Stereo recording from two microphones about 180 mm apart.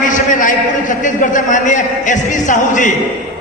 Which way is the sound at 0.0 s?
45° left (ahead or behind).